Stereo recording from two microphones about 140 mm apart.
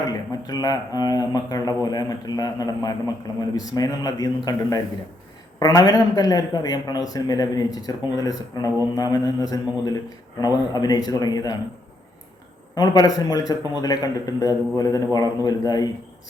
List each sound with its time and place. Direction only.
0.1 s a man's voice: 25° left (ahead or behind)
12.7 s a man's voice: 30° left (ahead or behind)